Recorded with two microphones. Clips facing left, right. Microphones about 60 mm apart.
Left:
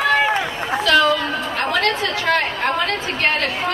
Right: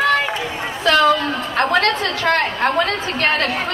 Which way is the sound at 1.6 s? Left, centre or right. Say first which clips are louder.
Right 4 dB; right.